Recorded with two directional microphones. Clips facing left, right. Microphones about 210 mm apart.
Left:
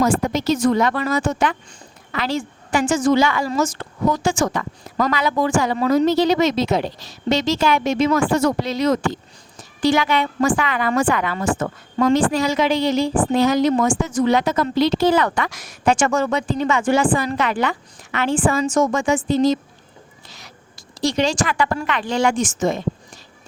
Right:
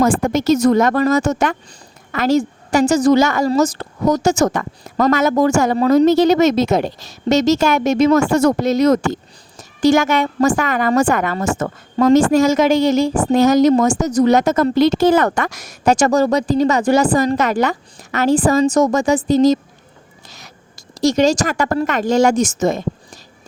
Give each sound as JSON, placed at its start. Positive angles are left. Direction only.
{"t": 0.0, "sound": "a woman's voice", "side_deg": -50}